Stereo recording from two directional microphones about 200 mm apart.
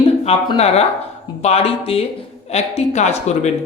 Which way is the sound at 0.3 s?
30° left (ahead or behind).